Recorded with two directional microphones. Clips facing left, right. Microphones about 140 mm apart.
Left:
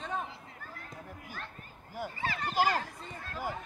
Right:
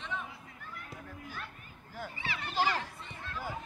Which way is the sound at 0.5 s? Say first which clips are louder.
Even; 40° left (ahead or behind).